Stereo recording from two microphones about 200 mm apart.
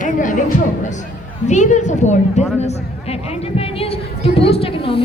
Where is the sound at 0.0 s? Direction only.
40° left (ahead or behind).